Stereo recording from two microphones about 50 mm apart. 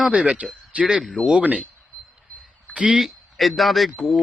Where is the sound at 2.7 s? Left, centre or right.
Right.